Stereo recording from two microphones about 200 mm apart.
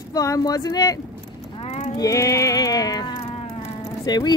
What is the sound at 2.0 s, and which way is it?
Music, 15° left (ahead or behind).